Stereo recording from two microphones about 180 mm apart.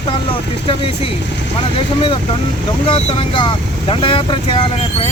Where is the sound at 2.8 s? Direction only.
30° left (ahead or behind).